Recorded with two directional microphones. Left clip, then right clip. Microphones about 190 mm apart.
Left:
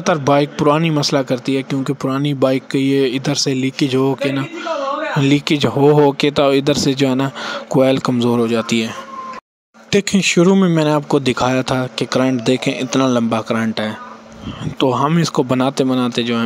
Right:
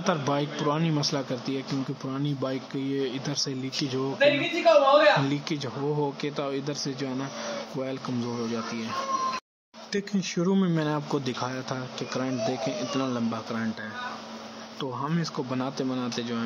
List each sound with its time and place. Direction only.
0.0 s speech: 40° left (ahead or behind)
5.2 s speech: 45° left (ahead or behind)
9.9 s speech: 50° left (ahead or behind)
10.5 s speech: 35° left (ahead or behind)